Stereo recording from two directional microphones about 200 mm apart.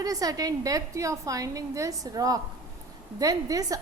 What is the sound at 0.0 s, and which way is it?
A woman's voice, 20° right (ahead or behind).